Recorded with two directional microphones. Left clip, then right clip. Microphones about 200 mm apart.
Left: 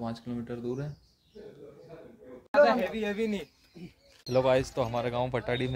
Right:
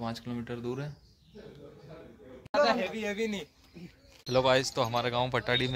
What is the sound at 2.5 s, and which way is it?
Speech, 45° left (ahead or behind).